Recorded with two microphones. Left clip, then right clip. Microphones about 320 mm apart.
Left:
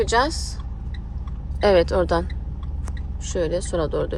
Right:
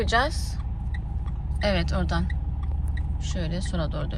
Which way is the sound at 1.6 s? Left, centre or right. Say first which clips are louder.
Left 10 dB; left.